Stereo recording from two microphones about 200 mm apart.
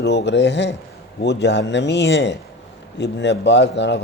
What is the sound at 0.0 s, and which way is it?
A man's voice, 55° left (ahead or behind).